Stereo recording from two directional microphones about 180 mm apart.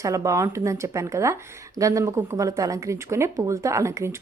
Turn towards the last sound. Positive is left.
turn(degrees=-15)  # may be behind; listen again after turning